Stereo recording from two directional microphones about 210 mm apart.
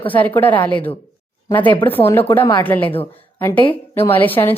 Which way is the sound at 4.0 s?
10° left (ahead or behind).